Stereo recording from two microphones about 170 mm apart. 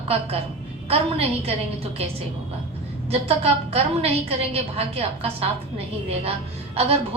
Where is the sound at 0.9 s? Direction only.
35° right (ahead or behind).